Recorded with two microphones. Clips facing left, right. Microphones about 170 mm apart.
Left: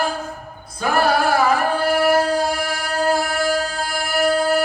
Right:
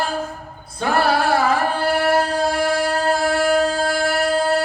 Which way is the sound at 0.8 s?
30° right (ahead or behind).